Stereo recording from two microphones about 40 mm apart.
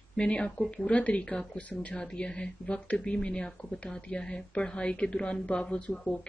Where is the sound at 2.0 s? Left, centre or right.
Left.